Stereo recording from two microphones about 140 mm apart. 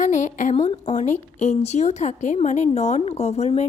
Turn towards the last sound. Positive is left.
turn(degrees=50)  # may be behind; listen again after turning